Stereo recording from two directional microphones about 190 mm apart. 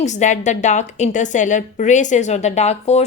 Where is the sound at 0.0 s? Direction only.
40° left (ahead or behind).